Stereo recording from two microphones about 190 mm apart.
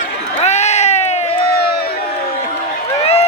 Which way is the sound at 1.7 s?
55° left (ahead or behind).